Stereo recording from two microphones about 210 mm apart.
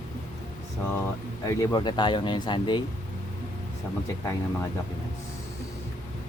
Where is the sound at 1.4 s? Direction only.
20° left (ahead or behind).